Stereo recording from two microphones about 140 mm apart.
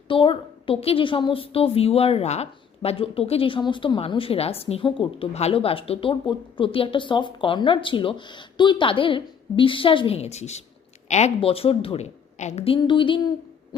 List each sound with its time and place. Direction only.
0.1 s a woman's voice: 40° left (ahead or behind)
12.4 s a woman's voice: 50° left (ahead or behind); by 13.2 s 35° left (ahead or behind)